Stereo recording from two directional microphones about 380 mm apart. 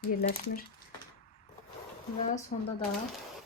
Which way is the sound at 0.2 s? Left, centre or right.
Left.